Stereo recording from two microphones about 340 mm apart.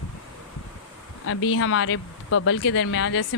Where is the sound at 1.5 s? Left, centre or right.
Left.